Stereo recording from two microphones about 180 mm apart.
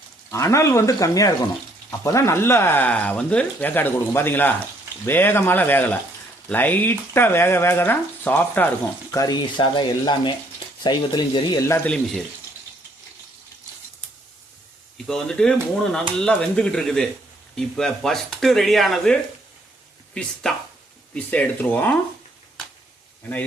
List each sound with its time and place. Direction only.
0.3 s speech: 15° left (ahead or behind)
9.1 s speech: 20° left (ahead or behind)
11.9 s speech: centre (ahead or behind)
15.0 s speech: 5° left (ahead or behind)
20.4 s speech: 5° left (ahead or behind)